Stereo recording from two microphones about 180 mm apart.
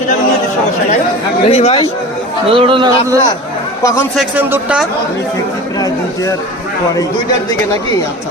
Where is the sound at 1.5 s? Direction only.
30° left (ahead or behind).